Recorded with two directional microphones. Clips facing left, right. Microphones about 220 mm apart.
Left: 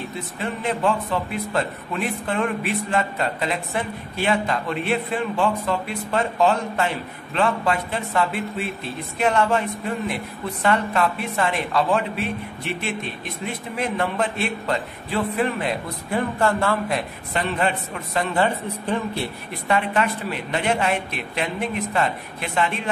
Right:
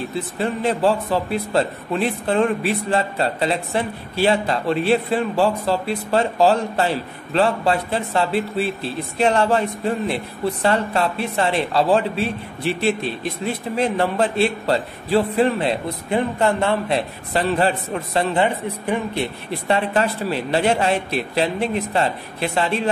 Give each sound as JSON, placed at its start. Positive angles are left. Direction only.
{"t": 0.1, "sound": "speech", "side_deg": -35}
{"t": 17.3, "sound": "speech", "side_deg": -35}
{"t": 18.4, "sound": "a woman's voice", "side_deg": -15}
{"t": 19.7, "sound": "speech", "side_deg": -35}